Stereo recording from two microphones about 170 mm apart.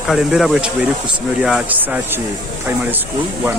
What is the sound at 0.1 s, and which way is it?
Speech, centre (ahead or behind).